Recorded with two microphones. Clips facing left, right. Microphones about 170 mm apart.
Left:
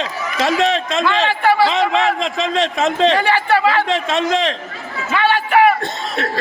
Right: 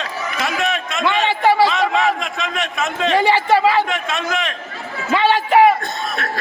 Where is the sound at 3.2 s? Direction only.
20° right (ahead or behind).